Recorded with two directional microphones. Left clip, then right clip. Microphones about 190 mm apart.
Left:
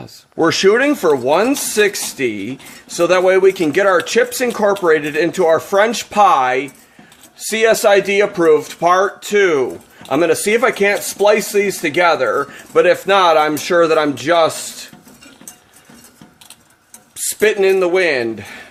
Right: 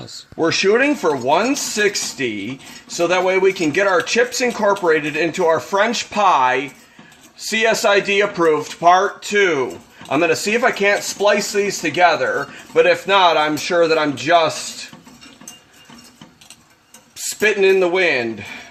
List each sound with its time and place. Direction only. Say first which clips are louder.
0.3 s speech: left 3 dB; 50° left (ahead or behind)
17.4 s speech: left 1 dB; 45° left (ahead or behind)